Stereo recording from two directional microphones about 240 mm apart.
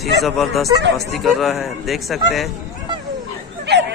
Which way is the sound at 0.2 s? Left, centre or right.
Centre.